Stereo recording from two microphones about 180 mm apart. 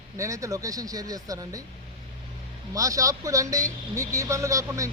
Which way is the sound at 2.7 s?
20° right (ahead or behind).